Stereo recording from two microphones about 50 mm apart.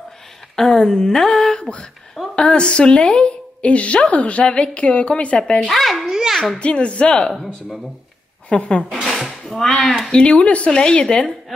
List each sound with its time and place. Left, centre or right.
0.6 s a woman's voice: centre
5.7 s babbling: centre
6.1 s children playing: centre
6.6 s a woman's voice: left
8.5 s a woman's voice: left
9.5 s speech: centre
10.1 s a woman's voice: left